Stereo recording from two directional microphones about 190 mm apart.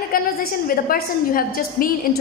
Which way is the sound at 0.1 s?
50° left (ahead or behind).